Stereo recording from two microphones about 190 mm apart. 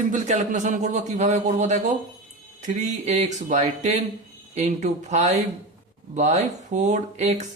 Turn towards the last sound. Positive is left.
turn(degrees=-35)  # may be behind; listen again after turning